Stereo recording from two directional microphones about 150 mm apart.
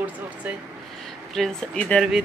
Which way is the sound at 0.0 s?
10° right (ahead or behind).